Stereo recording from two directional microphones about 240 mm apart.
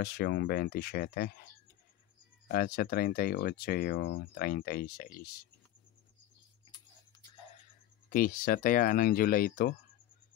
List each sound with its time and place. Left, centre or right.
0.0 s speech: left
2.4 s speech: left
8.1 s speech: left